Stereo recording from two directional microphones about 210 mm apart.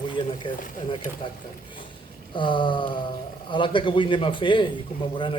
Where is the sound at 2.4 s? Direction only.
20° left (ahead or behind).